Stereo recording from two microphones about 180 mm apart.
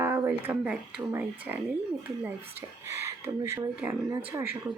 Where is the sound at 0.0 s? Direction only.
15° right (ahead or behind).